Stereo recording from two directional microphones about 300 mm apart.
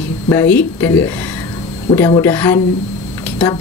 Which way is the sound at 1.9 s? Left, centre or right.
Centre.